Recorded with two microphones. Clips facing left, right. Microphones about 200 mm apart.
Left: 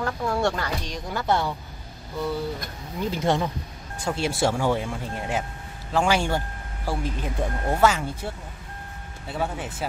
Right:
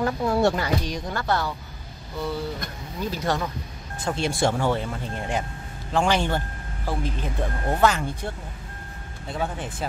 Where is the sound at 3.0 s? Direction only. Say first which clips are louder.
Left 3 dB; 25° left (ahead or behind).